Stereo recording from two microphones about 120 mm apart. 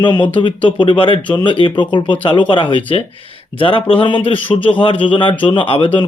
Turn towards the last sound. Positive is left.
turn(degrees=45)  # may be behind; listen again after turning